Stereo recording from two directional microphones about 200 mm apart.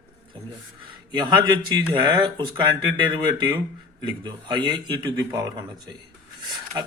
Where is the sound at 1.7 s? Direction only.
20° right (ahead or behind).